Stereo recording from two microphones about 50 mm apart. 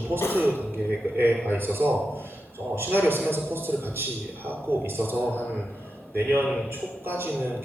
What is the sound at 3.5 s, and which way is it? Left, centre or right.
A man's voice, right.